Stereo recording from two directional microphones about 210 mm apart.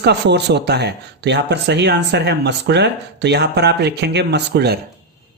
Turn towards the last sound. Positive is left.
turn(degrees=-50)  # may be behind; listen again after turning